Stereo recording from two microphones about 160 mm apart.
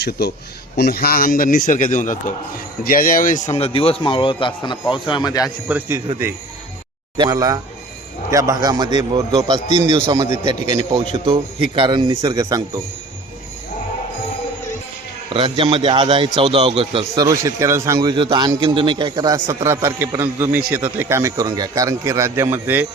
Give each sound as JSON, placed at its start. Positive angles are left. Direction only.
{"t": 0.0, "sound": "a man's voice", "side_deg": 90}
{"t": 0.8, "sound": "a man's voice", "side_deg": 70}
{"t": 3.5, "sound": "a man's voice", "side_deg": 35}
{"t": 5.6, "sound": "a man's voice", "side_deg": -10}
{"t": 7.2, "sound": "a man's voice", "side_deg": -20}
{"t": 11.0, "sound": "a man's voice", "side_deg": -35}
{"t": 15.3, "sound": "a man's voice", "side_deg": -35}
{"t": 17.2, "sound": "a man's voice", "side_deg": -20}